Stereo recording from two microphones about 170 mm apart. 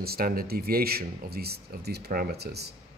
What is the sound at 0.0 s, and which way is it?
A man's voice, 65° right (ahead or behind).